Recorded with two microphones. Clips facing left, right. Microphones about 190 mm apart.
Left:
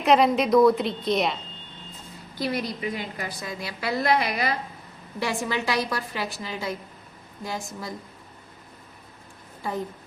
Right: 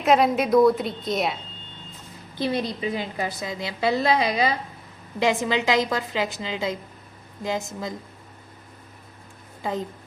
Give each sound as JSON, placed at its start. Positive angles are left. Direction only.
{"t": 0.0, "sound": "a woman's voice", "side_deg": 0}
{"t": 2.4, "sound": "a woman's voice", "side_deg": -30}
{"t": 9.6, "sound": "a woman's voice", "side_deg": -20}